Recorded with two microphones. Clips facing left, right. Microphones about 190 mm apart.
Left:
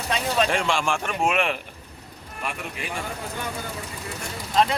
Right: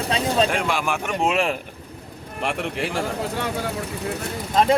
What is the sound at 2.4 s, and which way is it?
Speech, 80° right.